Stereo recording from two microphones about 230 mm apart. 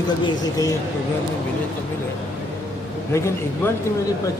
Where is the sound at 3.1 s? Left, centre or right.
Centre.